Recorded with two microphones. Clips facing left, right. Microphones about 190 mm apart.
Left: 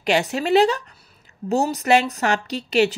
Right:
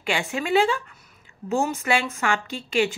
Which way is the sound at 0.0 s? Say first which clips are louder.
Left 6 dB; 40° left (ahead or behind).